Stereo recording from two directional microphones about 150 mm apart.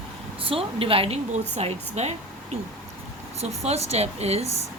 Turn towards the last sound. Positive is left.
turn(degrees=-45)  # may be behind; listen again after turning